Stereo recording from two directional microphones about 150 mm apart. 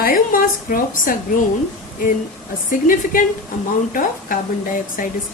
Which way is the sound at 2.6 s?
65° left (ahead or behind).